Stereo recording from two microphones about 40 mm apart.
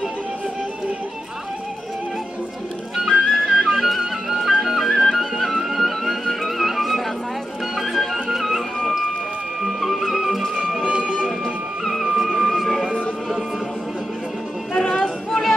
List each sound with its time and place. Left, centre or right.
3.3 s music: centre
4.6 s flute: centre
5.6 s music: centre
9.7 s music: centre
10.9 s music: right
11.4 s music: centre
12.5 s a sound: centre
14.8 s a sound: centre